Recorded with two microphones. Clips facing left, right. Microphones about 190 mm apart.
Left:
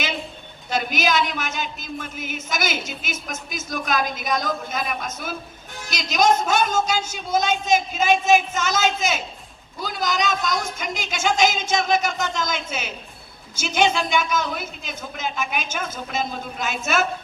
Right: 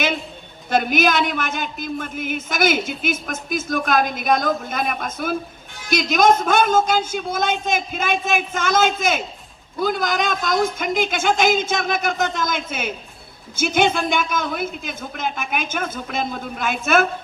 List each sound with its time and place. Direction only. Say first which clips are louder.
0.7 s speech: right 4 dB; 55° right (ahead or behind)